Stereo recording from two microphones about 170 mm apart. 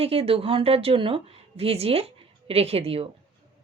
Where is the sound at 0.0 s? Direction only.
35° right (ahead or behind).